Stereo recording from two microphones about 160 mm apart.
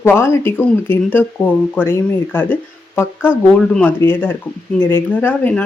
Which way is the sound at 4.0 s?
15° left (ahead or behind).